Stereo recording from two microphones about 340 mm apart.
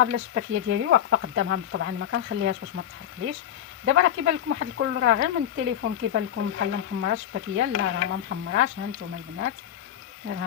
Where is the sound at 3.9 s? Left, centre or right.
Right.